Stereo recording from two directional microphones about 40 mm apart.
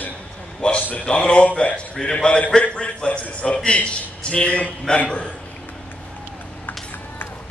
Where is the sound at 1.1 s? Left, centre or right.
Left.